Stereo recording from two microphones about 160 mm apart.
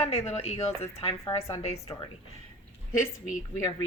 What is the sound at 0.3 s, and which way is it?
A woman's voice, 40° left (ahead or behind).